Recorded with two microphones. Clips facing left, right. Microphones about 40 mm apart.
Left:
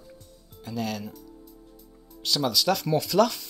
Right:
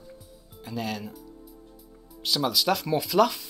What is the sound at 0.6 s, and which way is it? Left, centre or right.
Speech, centre.